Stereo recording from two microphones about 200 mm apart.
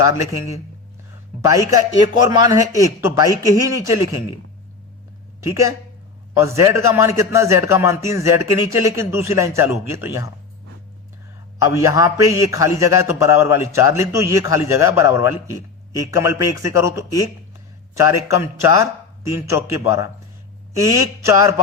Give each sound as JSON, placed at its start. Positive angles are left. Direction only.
{"t": 0.0, "sound": "a man's voice", "side_deg": -15}
{"t": 2.0, "sound": "a man's voice", "side_deg": -20}
{"t": 5.4, "sound": "a man's voice", "side_deg": -15}
{"t": 11.7, "sound": "a man's voice", "side_deg": -15}